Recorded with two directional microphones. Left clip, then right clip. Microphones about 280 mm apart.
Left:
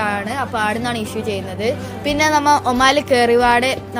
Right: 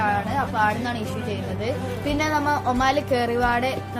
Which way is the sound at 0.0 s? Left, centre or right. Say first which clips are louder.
Left 2 dB; left.